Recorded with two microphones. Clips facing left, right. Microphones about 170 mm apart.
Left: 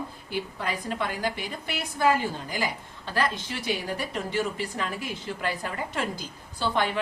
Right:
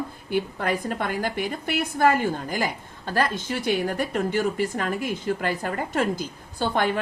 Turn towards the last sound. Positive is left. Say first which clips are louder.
# right 3 dB
turn(degrees=-50)  # may be behind; listen again after turning